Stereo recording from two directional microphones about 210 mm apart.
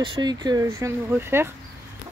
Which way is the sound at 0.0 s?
20° right (ahead or behind).